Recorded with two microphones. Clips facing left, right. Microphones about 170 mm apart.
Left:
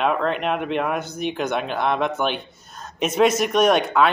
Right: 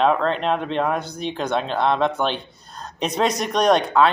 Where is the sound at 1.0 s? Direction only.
30° right (ahead or behind).